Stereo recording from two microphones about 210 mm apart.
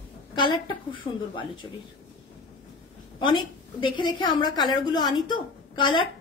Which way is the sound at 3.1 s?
20° left (ahead or behind).